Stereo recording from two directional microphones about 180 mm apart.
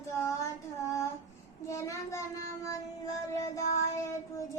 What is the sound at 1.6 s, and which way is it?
Child singing, 15° left (ahead or behind).